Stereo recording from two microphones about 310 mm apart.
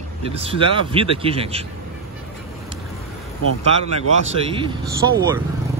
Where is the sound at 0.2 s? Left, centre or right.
Centre.